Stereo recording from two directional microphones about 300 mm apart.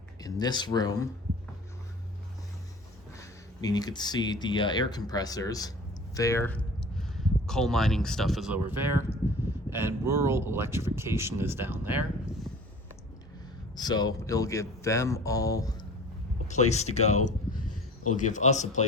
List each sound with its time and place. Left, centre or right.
0.2 s speech: centre
3.2 s speech: centre
13.7 s speech: centre
16.5 s speech: left